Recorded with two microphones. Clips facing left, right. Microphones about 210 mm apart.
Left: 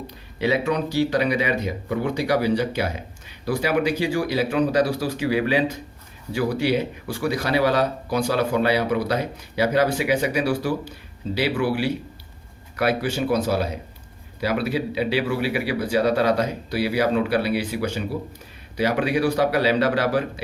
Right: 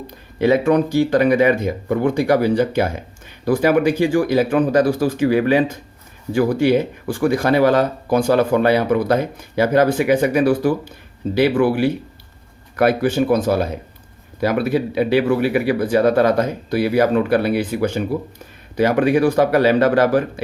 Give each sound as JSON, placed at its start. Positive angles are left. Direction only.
{"t": 0.3, "sound": "speech", "side_deg": -50}